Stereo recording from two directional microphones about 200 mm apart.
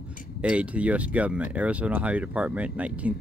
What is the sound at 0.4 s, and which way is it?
Speech, 5° right (ahead or behind).